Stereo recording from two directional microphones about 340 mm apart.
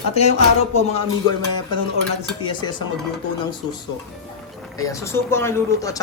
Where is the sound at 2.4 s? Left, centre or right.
Centre.